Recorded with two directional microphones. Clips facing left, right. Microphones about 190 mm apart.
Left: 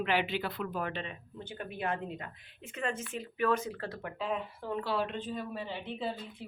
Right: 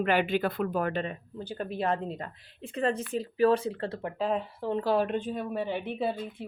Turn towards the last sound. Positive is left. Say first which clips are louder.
# right 7 dB
turn(degrees=-55)  # may be behind; listen again after turning